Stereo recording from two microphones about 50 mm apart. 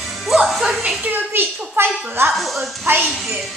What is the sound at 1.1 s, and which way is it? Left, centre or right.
A child's voice, right.